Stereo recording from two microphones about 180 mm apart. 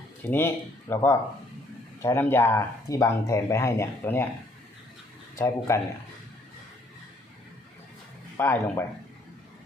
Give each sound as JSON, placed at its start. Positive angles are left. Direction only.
{"t": 0.2, "sound": "speech", "side_deg": 10}
{"t": 5.4, "sound": "speech", "side_deg": 15}
{"t": 8.4, "sound": "speech", "side_deg": 15}